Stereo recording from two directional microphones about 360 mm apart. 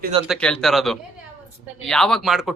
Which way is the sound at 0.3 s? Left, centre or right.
Centre.